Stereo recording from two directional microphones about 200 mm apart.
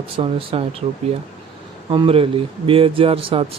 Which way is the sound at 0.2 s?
30° right (ahead or behind).